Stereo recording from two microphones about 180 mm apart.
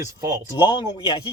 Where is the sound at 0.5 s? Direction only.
25° left (ahead or behind).